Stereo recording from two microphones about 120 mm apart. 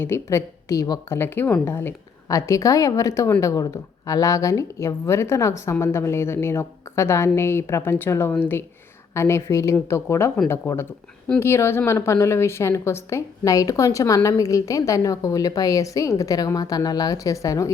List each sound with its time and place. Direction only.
0.0 s a woman's voice: 20° left (ahead or behind)